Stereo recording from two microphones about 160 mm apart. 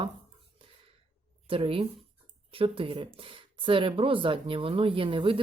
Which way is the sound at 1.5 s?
35° right (ahead or behind).